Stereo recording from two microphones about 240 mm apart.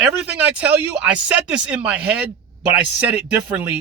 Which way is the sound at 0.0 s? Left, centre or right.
Centre.